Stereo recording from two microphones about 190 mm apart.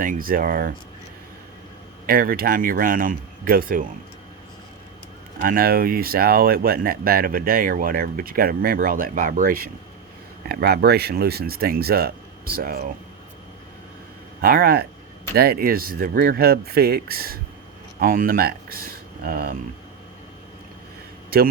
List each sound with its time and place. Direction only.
0.0 s speech: 45° right (ahead or behind)
2.0 s speech: 50° right (ahead or behind)
5.4 s speech: 50° right (ahead or behind)
14.4 s speech: 50° right (ahead or behind)
21.3 s speech: 50° right (ahead or behind)